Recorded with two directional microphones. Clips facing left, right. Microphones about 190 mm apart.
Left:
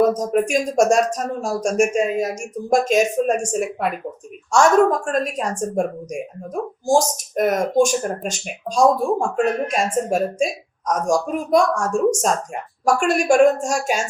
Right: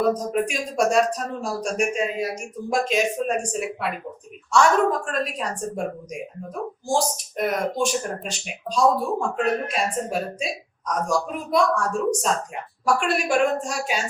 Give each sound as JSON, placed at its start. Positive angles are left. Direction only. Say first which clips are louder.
{"t": 0.0, "sound": "speech", "louder": "left 4 dB", "side_deg": 45}